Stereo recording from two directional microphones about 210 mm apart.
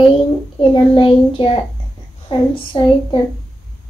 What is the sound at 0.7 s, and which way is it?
Speech, 25° left (ahead or behind).